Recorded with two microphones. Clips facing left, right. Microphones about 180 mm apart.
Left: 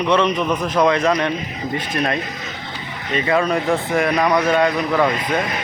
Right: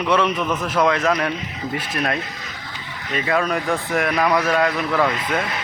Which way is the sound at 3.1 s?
Centre (ahead or behind).